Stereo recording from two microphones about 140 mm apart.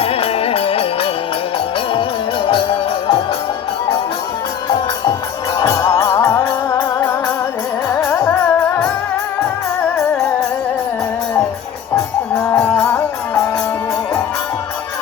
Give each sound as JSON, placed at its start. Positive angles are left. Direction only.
{"t": 0.0, "sound": "music", "side_deg": 45}
{"t": 2.5, "sound": "music", "side_deg": 40}
{"t": 5.5, "sound": "music", "side_deg": 30}
{"t": 12.5, "sound": "music", "side_deg": 10}